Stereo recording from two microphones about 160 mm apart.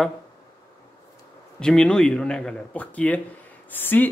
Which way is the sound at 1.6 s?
5° left (ahead or behind).